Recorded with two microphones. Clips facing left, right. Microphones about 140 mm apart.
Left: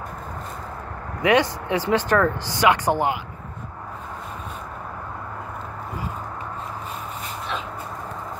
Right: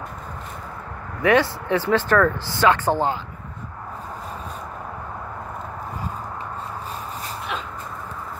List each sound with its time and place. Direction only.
1.2 s speech: 15° left (ahead or behind)